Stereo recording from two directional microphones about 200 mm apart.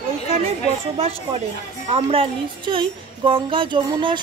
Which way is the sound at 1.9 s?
25° right (ahead or behind).